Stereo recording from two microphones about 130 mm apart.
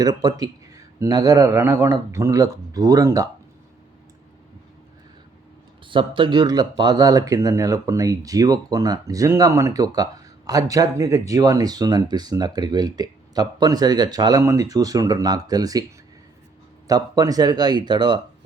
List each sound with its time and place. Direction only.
0.0 s speech: 30° right (ahead or behind)
5.9 s speech: 40° right (ahead or behind)
16.8 s speech: 30° right (ahead or behind)